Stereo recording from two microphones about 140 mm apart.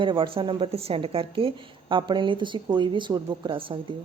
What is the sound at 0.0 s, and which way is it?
A woman's voice, 35° right (ahead or behind).